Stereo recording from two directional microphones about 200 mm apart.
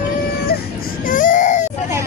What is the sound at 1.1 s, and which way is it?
Baby cry, 40° left (ahead or behind).